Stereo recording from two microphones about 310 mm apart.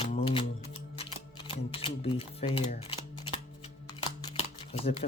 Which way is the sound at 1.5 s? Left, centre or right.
Centre.